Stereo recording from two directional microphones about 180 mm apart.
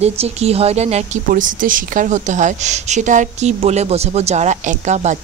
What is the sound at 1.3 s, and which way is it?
A woman's voice, 50° right (ahead or behind).